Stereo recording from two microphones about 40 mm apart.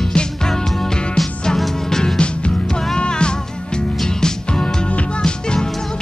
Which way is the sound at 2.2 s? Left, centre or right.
Left.